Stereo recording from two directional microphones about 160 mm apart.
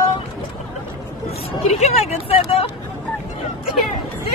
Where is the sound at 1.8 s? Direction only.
40° left (ahead or behind).